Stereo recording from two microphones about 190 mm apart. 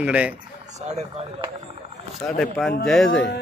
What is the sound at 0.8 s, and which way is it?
Speech, 35° right (ahead or behind).